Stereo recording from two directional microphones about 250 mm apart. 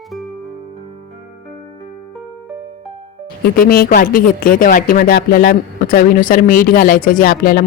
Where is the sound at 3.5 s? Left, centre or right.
Left.